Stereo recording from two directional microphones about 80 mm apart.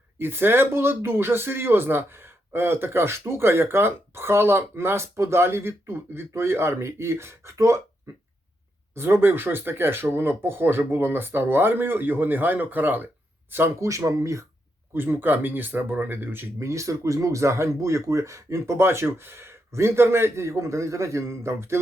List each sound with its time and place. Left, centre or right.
0.2 s speech: right
9.0 s speech: right
13.7 s speech: right
14.9 s speech: right
16.6 s speech: right